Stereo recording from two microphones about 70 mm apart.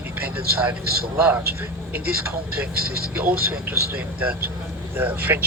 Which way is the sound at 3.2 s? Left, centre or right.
Right.